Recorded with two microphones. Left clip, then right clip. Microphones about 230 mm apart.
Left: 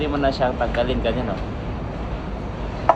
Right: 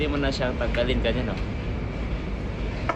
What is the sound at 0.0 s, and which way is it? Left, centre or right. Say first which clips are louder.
Speech: left 6 dB; right.